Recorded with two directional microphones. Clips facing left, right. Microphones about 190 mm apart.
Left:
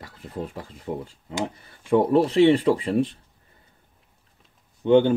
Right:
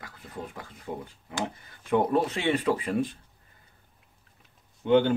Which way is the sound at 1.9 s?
30° left (ahead or behind).